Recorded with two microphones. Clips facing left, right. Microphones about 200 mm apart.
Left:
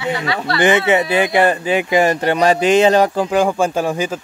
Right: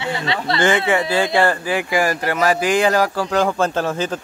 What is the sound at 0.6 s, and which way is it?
Speech, 20° left (ahead or behind).